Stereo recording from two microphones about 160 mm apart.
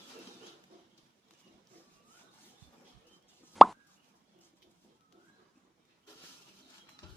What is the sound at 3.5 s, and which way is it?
Plop, centre (ahead or behind).